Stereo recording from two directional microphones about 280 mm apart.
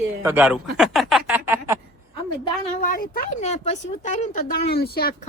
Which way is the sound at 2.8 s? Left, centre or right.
Left.